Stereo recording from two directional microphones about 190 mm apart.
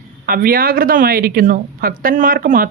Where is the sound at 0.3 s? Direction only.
50° right (ahead or behind).